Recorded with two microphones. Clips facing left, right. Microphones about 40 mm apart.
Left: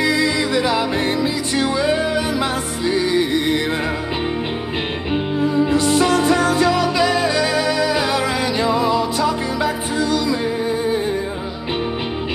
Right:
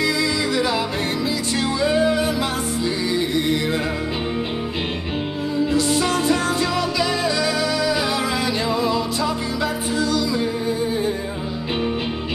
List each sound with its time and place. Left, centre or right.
0.0 s music: left
5.6 s music: left